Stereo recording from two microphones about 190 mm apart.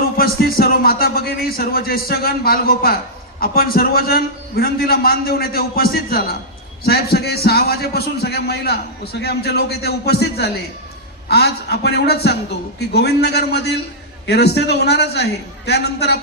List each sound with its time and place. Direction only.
0.2 s a man's voice: 55° left (ahead or behind)